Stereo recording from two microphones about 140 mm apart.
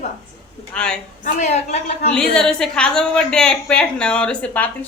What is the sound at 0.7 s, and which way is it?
Speech, 5° left (ahead or behind).